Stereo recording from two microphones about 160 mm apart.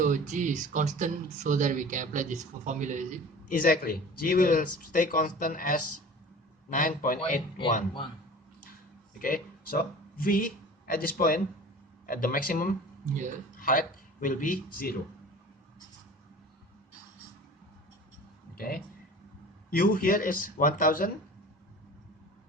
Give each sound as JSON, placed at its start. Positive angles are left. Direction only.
{"t": 0.0, "sound": "speech", "side_deg": -50}
{"t": 3.5, "sound": "speech", "side_deg": 65}
{"t": 9.1, "sound": "speech", "side_deg": 60}
{"t": 18.5, "sound": "speech", "side_deg": 65}